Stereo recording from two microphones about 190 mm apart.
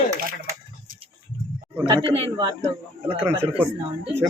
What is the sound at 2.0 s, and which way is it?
Speech, 30° right (ahead or behind).